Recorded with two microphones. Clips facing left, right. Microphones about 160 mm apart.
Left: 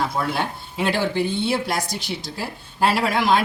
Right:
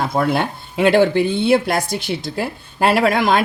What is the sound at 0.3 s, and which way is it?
Speech, 60° right (ahead or behind).